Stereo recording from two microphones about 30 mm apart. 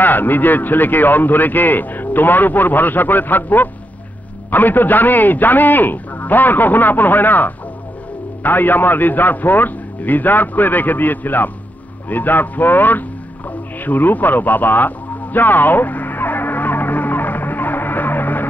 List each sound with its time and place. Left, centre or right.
0.0 s a man's voice: left
13.5 s music: left